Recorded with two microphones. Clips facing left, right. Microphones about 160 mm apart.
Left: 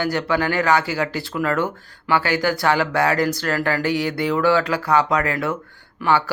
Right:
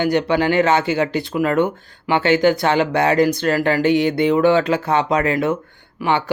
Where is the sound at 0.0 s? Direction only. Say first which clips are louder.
Right 4 dB; 20° right (ahead or behind).